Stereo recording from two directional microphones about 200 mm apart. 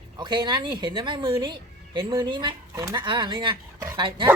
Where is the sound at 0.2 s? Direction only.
20° right (ahead or behind).